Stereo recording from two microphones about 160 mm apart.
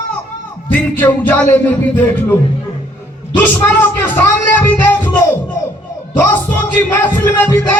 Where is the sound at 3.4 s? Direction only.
10° left (ahead or behind).